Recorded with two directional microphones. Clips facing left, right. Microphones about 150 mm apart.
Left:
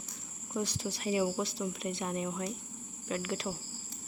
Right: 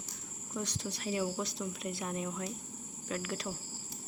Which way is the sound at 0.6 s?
5° left (ahead or behind).